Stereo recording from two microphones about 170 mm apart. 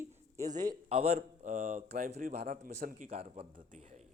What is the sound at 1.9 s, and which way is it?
Speech, 60° right (ahead or behind).